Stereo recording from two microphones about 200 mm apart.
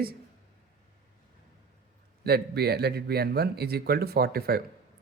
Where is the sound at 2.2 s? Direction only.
50° right (ahead or behind).